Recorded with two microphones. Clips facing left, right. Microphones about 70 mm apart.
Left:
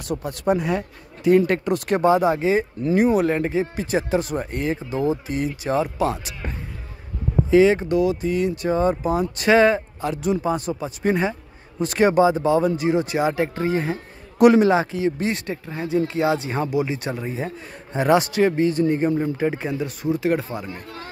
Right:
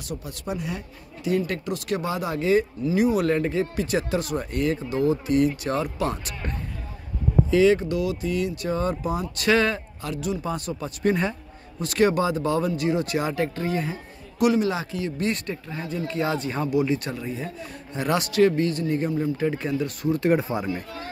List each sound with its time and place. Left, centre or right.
0.1 s speech: left
2.0 s speech: left
3.3 s speech: left
7.5 s speech: left
11.8 s speech: left
13.6 s speech: left
14.7 s speech: left
16.2 s speech: centre
17.1 s speech: left
19.3 s speech: left
20.4 s speech: centre